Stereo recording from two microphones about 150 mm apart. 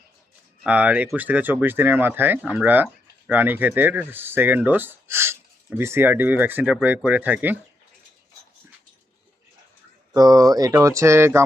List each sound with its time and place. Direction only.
0.6 s speech: 10° right (ahead or behind)
10.2 s speech: 25° right (ahead or behind)